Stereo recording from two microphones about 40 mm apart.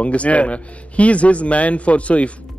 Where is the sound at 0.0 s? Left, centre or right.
Left.